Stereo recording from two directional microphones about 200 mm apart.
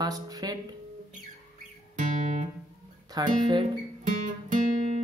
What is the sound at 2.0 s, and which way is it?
Music, 35° right (ahead or behind).